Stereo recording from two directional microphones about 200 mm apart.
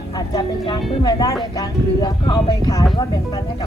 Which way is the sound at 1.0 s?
20° left (ahead or behind).